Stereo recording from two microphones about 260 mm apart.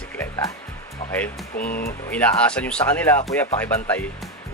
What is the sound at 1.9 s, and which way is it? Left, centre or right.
Speech, centre.